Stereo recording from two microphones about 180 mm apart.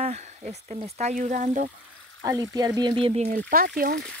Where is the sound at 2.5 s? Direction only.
20° right (ahead or behind).